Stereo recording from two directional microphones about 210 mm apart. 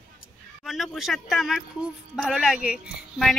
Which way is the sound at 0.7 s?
Centre (ahead or behind).